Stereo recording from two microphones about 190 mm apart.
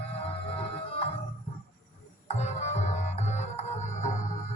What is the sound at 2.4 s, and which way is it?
Music, 35° left (ahead or behind).